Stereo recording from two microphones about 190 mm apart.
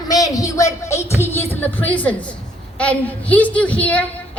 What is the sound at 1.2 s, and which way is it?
A woman's voice, 10° left (ahead or behind).